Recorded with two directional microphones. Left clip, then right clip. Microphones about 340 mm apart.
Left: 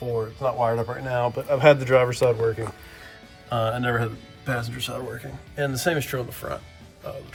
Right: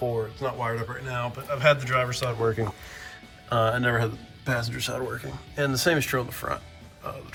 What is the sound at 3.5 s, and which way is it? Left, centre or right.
Speech, centre.